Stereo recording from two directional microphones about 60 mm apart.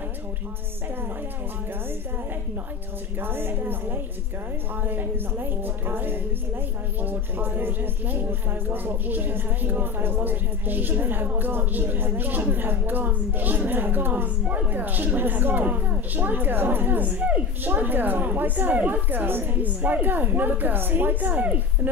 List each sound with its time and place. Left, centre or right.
3.2 s a woman's voice: right